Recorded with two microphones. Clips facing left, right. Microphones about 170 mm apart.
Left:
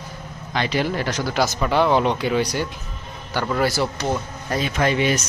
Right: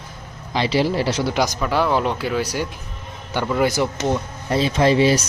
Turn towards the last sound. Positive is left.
turn(degrees=-30)  # may be behind; listen again after turning